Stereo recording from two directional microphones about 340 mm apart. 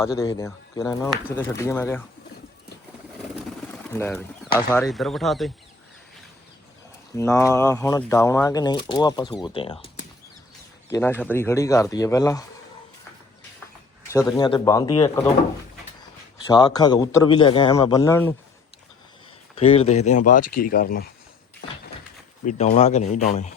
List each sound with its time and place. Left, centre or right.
0.2 s speech: centre
3.7 s pigeon: centre
4.7 s speech: centre
7.2 s speech: centre
14.1 s speech: centre
16.5 s speech: centre
19.5 s speech: centre
22.4 s speech: centre